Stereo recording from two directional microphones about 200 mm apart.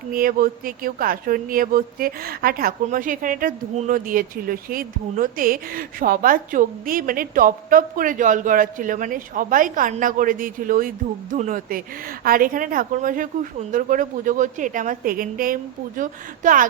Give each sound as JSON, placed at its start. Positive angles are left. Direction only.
{"t": 0.1, "sound": "a woman's voice", "side_deg": -45}